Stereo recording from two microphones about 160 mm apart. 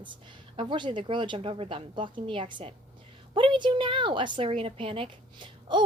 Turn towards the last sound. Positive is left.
turn(degrees=-30)  # may be behind; listen again after turning